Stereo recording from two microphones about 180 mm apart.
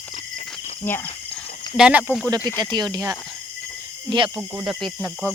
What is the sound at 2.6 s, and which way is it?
Speech, 25° right (ahead or behind).